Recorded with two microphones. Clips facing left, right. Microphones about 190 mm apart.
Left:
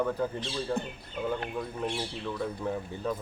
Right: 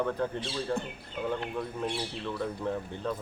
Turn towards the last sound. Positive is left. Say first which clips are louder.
# even
turn(degrees=5)  # may be behind; listen again after turning